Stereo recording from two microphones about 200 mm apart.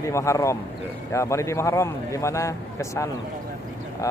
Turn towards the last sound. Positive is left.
turn(degrees=15)  # may be behind; listen again after turning